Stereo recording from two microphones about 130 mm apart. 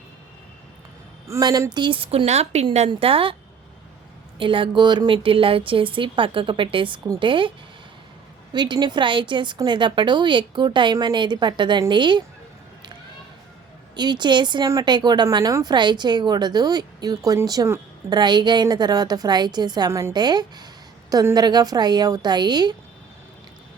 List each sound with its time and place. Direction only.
1.3 s speech: 30° right (ahead or behind); by 3.3 s 45° right (ahead or behind)
4.4 s speech: 40° right (ahead or behind)
8.5 s speech: 35° right (ahead or behind)
13.9 s speech: 35° right (ahead or behind)
19.9 s a woman's voice: 20° right (ahead or behind)
20.1 s speech: 35° right (ahead or behind)